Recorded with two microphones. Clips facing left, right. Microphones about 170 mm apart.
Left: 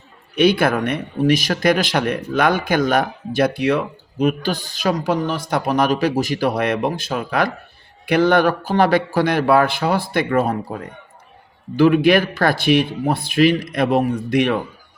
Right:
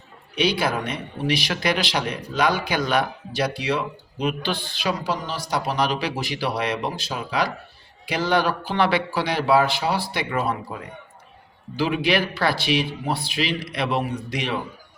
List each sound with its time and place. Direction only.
0.3 s speech: 55° left (ahead or behind)